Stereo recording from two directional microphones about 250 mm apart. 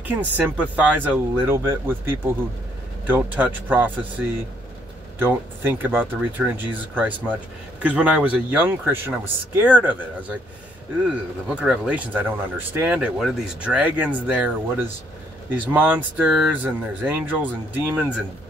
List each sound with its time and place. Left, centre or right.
0.0 s speech: centre
5.2 s speech: centre